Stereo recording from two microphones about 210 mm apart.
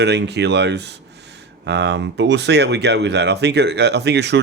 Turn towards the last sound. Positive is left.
turn(degrees=-55)  # may be behind; listen again after turning